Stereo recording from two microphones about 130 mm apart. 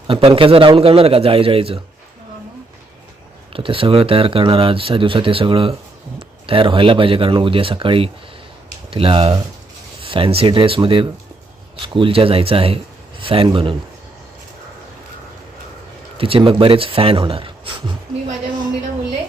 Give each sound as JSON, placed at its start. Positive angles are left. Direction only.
{"t": 0.1, "sound": "speech", "side_deg": -45}
{"t": 3.5, "sound": "speech", "side_deg": -45}
{"t": 16.1, "sound": "speech", "side_deg": -45}